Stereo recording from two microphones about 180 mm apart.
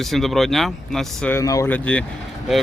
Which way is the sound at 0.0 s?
Centre (ahead or behind).